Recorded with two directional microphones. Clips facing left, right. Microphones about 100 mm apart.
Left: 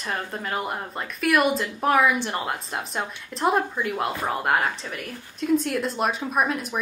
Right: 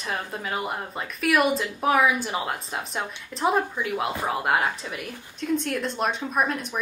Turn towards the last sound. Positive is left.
turn(degrees=5)  # may be behind; listen again after turning